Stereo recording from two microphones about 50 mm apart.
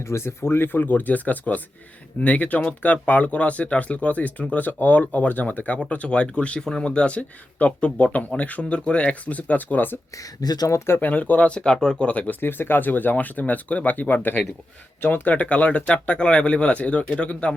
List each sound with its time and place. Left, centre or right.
0.1 s speech: left
11.0 s speech: left
12.4 s speech: left